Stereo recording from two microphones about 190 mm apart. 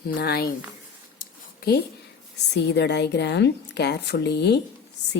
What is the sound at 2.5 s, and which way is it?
A woman's voice, 65° left (ahead or behind).